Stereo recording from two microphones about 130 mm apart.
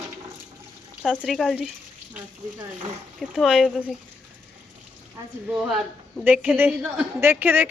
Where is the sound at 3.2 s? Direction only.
Centre (ahead or behind).